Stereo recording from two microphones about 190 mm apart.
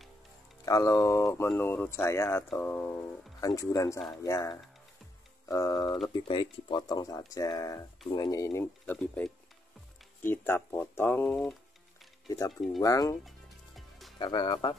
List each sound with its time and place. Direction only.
0.7 s speech: 20° left (ahead or behind)
12.3 s speech: 20° left (ahead or behind)
13.7 s music: centre (ahead or behind)
14.1 s speech: 25° left (ahead or behind)